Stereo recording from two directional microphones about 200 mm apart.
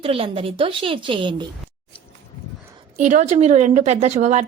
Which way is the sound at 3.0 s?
35° right (ahead or behind).